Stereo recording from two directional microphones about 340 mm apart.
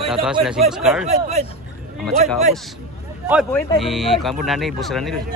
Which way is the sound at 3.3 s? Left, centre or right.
Centre.